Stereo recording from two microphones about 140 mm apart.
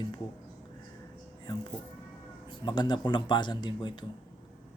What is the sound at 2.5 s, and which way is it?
A man's voice, 30° left (ahead or behind).